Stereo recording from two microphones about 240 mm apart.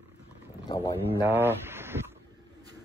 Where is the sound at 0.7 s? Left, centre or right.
Centre.